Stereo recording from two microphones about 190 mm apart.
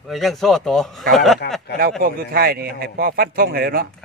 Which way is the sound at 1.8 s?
50° right (ahead or behind).